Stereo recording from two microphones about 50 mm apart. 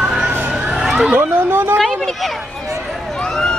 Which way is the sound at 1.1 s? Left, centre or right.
Right.